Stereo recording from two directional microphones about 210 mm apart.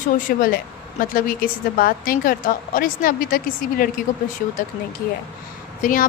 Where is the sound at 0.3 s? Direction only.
40° left (ahead or behind).